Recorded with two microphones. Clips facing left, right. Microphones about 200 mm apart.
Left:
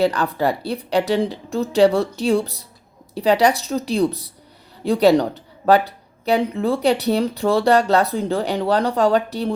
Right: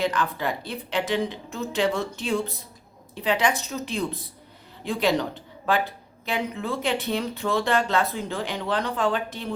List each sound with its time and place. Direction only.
0.0 s speech: 35° left (ahead or behind)